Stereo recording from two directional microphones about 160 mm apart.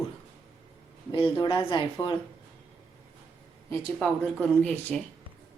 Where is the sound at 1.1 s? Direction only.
30° left (ahead or behind).